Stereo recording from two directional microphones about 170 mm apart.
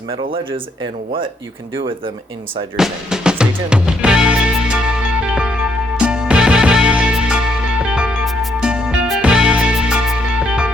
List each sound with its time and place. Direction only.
0.1 s speech: 30° right (ahead or behind)
1.7 s speech: 30° right (ahead or behind)
2.7 s music: 5° right (ahead or behind)